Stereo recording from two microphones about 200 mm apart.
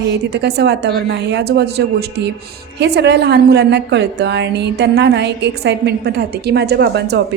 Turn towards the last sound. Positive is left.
turn(degrees=-60)  # may be behind; listen again after turning